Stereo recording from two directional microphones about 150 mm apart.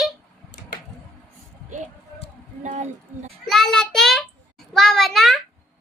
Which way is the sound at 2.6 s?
55° right (ahead or behind).